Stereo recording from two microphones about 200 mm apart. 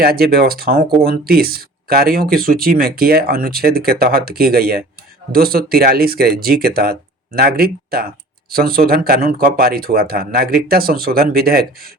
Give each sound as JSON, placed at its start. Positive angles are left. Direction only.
{"t": 0.0, "sound": "speech", "side_deg": -50}